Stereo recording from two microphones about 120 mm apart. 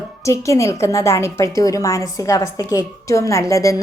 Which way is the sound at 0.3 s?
25° left (ahead or behind).